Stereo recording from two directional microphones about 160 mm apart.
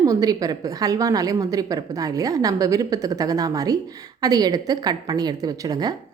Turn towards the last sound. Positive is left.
turn(degrees=-25)  # may be behind; listen again after turning